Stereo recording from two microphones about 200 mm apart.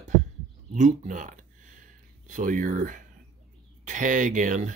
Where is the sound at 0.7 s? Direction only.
35° right (ahead or behind).